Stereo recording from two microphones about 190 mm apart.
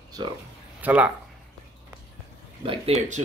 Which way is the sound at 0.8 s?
5° right (ahead or behind).